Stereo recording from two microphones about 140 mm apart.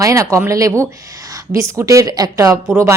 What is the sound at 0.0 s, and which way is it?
A woman's voice, 20° right (ahead or behind).